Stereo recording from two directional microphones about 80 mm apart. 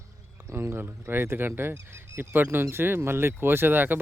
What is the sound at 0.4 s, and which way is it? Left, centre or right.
Speech, right.